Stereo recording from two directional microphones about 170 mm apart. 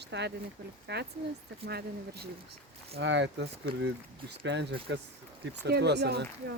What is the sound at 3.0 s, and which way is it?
Speech, 90° right.